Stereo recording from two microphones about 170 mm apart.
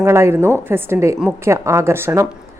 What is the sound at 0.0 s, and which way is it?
A woman's voice, 15° right (ahead or behind).